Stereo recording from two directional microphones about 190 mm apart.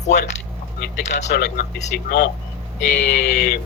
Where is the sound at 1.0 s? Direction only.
35° left (ahead or behind).